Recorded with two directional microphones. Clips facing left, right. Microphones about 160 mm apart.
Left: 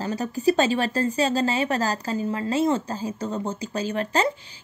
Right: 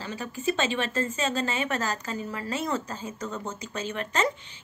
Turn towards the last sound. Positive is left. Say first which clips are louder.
# left 4 dB
turn(degrees=35)  # may be behind; listen again after turning